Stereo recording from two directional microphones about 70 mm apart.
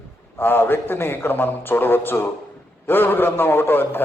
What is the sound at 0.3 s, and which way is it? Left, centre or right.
A man's voice, left.